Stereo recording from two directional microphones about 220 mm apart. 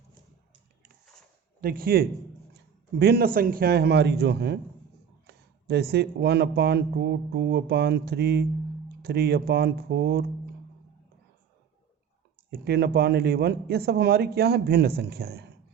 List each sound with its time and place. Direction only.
1.6 s speech: 40° right (ahead or behind)
12.5 s speech: 45° right (ahead or behind)